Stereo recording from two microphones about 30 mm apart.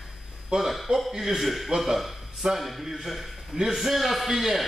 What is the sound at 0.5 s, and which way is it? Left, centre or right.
Speech, right.